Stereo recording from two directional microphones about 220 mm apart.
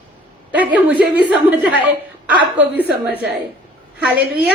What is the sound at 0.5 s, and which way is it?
Speech, 5° right (ahead or behind).